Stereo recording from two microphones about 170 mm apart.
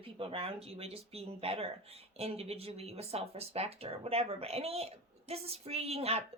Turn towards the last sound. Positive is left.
turn(degrees=-35)  # may be behind; listen again after turning